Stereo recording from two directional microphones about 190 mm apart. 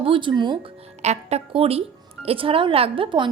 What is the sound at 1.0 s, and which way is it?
A woman's voice, 35° right (ahead or behind).